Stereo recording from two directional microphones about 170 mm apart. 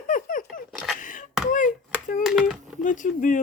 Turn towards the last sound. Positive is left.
turn(degrees=50)  # may be behind; listen again after turning